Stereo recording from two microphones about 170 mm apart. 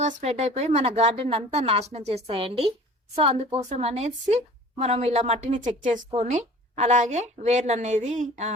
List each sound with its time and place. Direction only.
0.0 s a woman's voice: 40° right (ahead or behind)